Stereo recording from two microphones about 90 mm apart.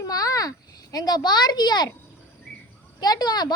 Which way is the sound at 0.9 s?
50° left (ahead or behind).